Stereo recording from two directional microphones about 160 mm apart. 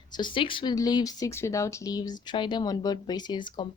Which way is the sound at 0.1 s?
30° left (ahead or behind).